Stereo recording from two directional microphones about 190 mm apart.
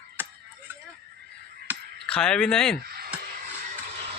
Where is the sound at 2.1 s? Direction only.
5° left (ahead or behind).